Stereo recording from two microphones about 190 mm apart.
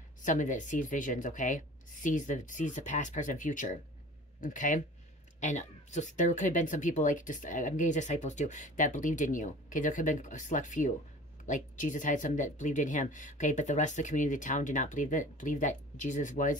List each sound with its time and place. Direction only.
0.2 s speech: 40° left (ahead or behind)